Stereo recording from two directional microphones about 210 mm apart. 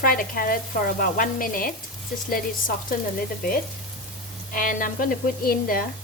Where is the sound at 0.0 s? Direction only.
40° left (ahead or behind).